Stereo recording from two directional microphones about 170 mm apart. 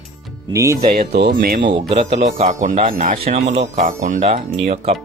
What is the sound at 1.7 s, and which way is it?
Speech, 30° right (ahead or behind).